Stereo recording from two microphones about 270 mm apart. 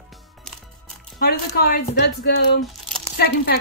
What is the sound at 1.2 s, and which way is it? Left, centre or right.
Speech, left.